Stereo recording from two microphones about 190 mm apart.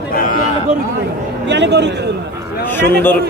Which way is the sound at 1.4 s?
65° right (ahead or behind).